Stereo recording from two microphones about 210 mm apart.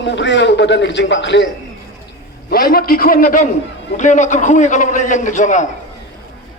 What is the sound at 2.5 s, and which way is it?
A man's voice, 45° left (ahead or behind).